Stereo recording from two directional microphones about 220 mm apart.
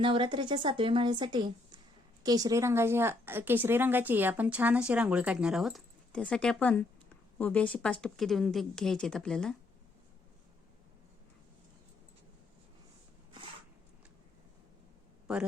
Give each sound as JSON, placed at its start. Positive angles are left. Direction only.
{"t": 0.0, "sound": "a woman's voice", "side_deg": -20}